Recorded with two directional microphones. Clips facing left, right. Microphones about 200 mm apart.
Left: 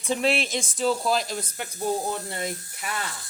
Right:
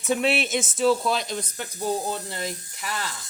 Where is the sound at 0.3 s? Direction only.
5° right (ahead or behind).